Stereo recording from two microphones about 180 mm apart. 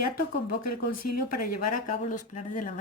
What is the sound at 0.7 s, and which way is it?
Speech, 50° left (ahead or behind).